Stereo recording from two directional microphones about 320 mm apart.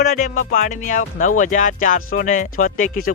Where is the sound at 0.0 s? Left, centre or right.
Left.